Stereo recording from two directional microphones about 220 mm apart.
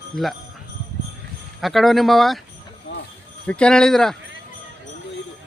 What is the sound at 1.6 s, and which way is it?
Speech, centre (ahead or behind).